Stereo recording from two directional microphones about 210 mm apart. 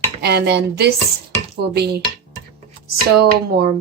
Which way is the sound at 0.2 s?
50° right (ahead or behind).